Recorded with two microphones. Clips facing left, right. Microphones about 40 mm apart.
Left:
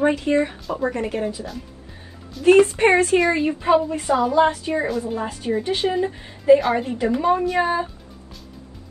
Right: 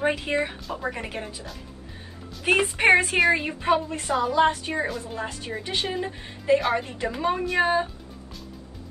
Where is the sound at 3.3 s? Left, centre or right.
Centre.